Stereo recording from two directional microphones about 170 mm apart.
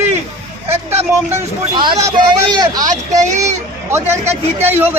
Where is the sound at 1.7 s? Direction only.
25° right (ahead or behind).